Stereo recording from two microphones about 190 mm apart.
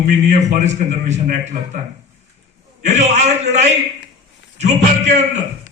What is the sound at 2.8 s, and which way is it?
A man's voice, 35° right (ahead or behind).